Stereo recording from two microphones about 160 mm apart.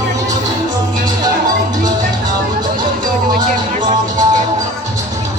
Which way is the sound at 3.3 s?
55° right (ahead or behind).